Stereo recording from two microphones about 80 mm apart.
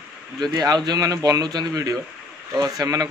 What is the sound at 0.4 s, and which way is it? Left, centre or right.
A man's voice, right.